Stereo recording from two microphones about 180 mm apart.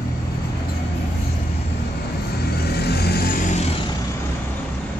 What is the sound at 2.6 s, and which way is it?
Vehicle, 65° left (ahead or behind).